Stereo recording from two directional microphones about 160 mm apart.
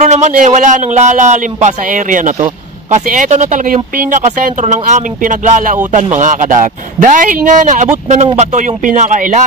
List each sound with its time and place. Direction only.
0.0 s speech: 45° right (ahead or behind)